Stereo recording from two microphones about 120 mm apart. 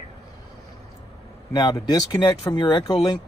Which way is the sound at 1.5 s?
30° left (ahead or behind).